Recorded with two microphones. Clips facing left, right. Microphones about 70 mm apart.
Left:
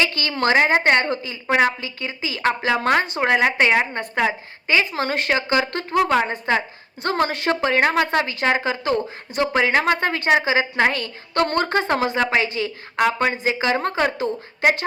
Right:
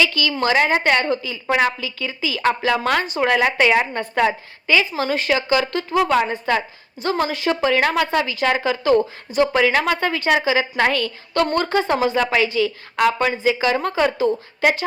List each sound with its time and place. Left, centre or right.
0.0 s a woman's voice: left
4.6 s speech: left
4.9 s speech: left
5.3 s a woman's voice: left
7.0 s a woman's voice: left
11.4 s a woman's voice: left